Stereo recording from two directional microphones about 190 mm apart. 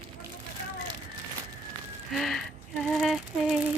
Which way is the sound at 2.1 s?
Centre (ahead or behind).